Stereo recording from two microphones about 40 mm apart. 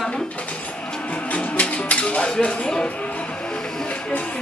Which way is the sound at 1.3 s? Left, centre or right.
Left.